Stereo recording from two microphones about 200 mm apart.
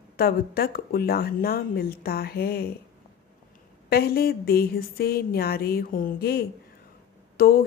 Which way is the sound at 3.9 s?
50° left (ahead or behind).